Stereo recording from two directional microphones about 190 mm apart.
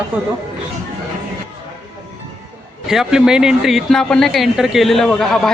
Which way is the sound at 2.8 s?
Centre (ahead or behind).